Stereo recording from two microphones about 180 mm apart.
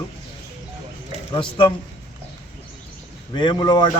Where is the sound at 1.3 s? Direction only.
25° left (ahead or behind).